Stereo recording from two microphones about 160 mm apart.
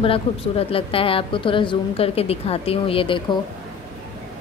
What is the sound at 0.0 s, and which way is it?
A woman's voice, 35° left (ahead or behind).